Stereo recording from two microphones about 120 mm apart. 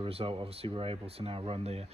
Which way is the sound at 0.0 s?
50° right (ahead or behind).